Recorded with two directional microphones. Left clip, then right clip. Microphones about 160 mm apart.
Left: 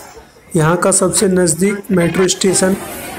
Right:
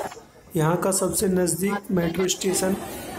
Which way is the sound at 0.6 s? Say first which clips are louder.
Left 10 dB; 25° left (ahead or behind).